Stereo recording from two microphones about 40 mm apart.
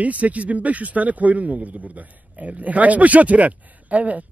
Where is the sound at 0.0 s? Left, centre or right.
Right.